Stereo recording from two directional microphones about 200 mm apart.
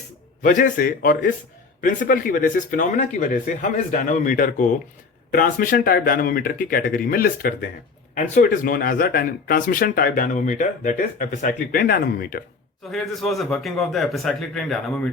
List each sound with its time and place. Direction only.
0.4 s speech: 40° left (ahead or behind)
12.9 s a man's voice: centre (ahead or behind)